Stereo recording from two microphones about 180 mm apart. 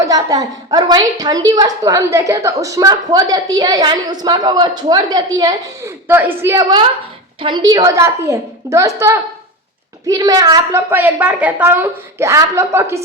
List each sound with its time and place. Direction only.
0.0 s a woman's voice: 20° right (ahead or behind)